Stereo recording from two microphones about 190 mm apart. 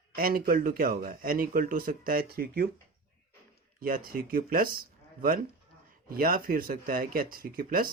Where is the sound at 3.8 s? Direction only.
50° right (ahead or behind).